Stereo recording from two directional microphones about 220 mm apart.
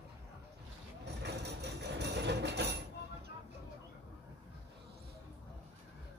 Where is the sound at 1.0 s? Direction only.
50° right (ahead or behind).